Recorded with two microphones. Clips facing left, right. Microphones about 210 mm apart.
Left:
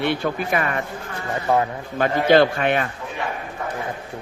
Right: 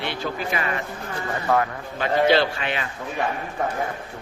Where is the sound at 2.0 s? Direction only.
50° left (ahead or behind).